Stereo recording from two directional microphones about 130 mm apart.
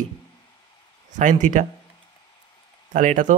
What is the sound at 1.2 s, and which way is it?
Speech, 70° right (ahead or behind).